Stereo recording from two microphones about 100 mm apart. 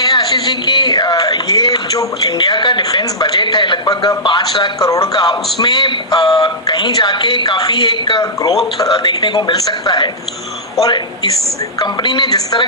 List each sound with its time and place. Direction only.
0.0 s a sound: 45° left (ahead or behind)
4.2 s speech: 50° left (ahead or behind)
8.2 s speech: 35° left (ahead or behind)
8.8 s speech: 45° left (ahead or behind)